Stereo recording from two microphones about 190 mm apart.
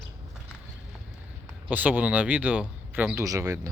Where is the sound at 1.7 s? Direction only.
10° right (ahead or behind).